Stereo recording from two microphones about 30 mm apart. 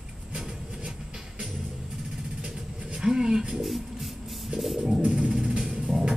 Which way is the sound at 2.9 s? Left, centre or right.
Right.